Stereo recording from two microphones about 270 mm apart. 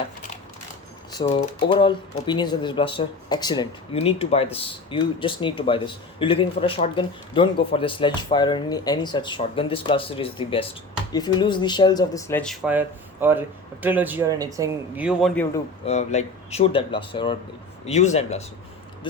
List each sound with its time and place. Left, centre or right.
1.2 s a man's voice: left; by 15.4 s centre
15.9 s speech: left